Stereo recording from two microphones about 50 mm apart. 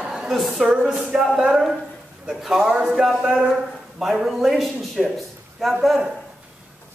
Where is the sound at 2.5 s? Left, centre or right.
Centre.